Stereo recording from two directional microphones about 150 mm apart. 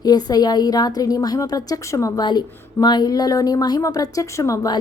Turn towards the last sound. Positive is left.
turn(degrees=25)  # may be behind; listen again after turning